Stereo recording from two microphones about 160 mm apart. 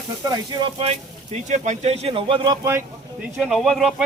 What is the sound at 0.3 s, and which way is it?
Speech, 35° right (ahead or behind).